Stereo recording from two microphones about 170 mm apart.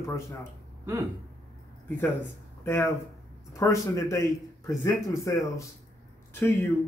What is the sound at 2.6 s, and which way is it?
Speech, 15° left (ahead or behind).